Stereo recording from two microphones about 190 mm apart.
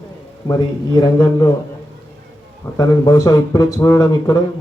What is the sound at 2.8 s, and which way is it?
A man's voice, 15° left (ahead or behind).